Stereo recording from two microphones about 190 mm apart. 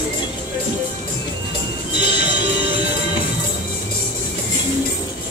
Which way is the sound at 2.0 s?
25° left (ahead or behind).